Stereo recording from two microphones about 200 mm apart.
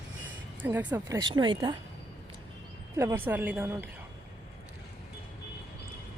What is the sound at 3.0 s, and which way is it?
Speech, 10° right (ahead or behind).